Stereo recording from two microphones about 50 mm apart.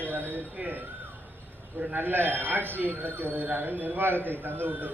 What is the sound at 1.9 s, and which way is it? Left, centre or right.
Speech, right.